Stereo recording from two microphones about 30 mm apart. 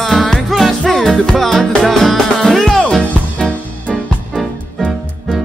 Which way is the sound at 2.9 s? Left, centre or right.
Left.